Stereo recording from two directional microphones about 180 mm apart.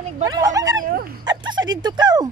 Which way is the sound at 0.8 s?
55° right (ahead or behind).